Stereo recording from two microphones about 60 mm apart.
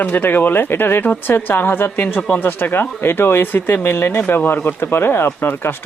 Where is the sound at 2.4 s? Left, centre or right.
Left.